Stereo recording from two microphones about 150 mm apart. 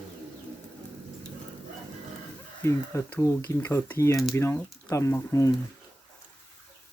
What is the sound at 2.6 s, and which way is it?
Speech, 20° left (ahead or behind).